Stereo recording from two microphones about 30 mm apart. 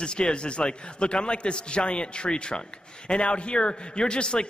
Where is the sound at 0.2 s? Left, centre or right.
Left.